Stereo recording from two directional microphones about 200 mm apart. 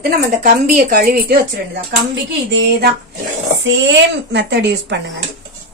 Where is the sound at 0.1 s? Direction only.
45° right (ahead or behind).